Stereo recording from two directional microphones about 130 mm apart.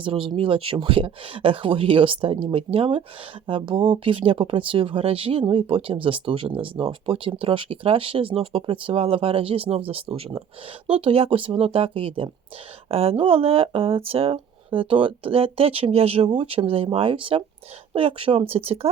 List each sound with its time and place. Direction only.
0.0 s speech: 45° right (ahead or behind)